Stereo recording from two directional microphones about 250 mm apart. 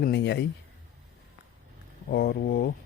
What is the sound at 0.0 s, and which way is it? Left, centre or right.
Speech, left.